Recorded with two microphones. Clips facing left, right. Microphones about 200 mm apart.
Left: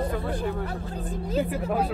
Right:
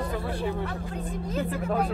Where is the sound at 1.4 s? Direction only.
10° left (ahead or behind).